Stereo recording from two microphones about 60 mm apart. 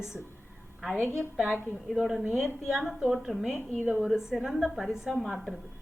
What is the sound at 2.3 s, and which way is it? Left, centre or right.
A woman's voice, centre.